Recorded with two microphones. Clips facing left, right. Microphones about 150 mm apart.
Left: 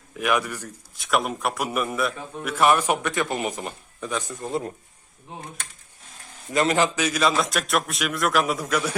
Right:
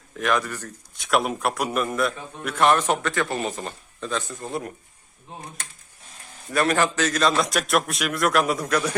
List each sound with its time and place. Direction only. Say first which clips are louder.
0.2 s a man's voice: even; 10° left (ahead or behind)
0.9 s a man's voice: right 2 dB; centre (ahead or behind); by 4.7 s 20° left (ahead or behind)
6.5 s a man's voice: even; 20° left (ahead or behind); by 9.0 s 5° left (ahead or behind)